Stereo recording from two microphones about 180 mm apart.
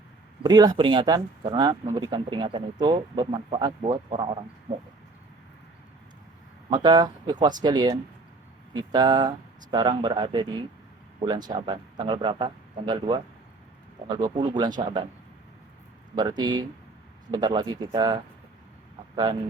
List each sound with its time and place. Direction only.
0.4 s speech: 20° right (ahead or behind)
6.7 s speech: 20° right (ahead or behind)
16.1 s speech: 25° right (ahead or behind)